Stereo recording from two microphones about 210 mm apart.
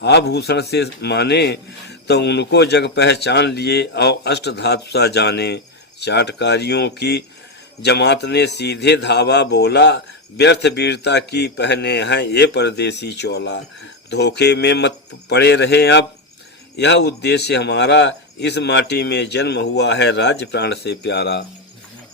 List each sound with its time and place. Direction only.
0.0 s a man's voice: 55° left (ahead or behind)